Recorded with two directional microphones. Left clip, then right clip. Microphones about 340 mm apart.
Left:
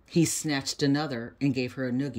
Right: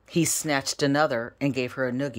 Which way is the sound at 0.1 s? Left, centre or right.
Centre.